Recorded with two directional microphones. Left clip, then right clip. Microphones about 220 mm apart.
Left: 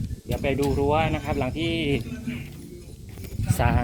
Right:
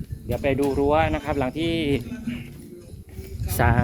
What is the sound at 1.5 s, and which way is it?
Speech, 65° right (ahead or behind).